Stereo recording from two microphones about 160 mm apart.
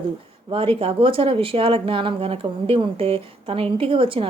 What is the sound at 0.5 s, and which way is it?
A woman's voice, 35° right (ahead or behind).